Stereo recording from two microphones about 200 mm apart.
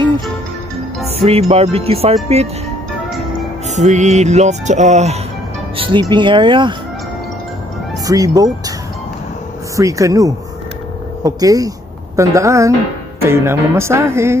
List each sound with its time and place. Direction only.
1.0 s music: 30° right (ahead or behind)
1.5 s speech: 30° right (ahead or behind)
3.7 s music: 35° right (ahead or behind)
5.8 s speech: 25° right (ahead or behind)
8.1 s speech: 20° right (ahead or behind)
9.8 s speech: 15° right (ahead or behind)